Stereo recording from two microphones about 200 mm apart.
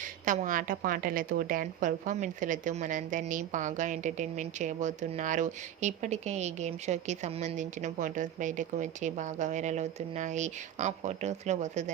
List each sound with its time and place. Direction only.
0.0 s a woman's voice: 40° right (ahead or behind)